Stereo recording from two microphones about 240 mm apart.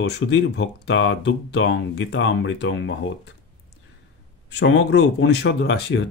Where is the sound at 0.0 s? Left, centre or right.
Left.